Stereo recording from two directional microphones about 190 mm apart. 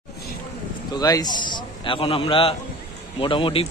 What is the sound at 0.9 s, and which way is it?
A man's voice, 20° left (ahead or behind).